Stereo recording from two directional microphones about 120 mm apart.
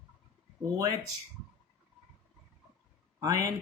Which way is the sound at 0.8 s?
35° right (ahead or behind).